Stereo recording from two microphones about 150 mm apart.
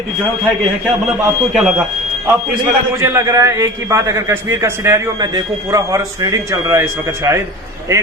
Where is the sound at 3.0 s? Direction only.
20° right (ahead or behind).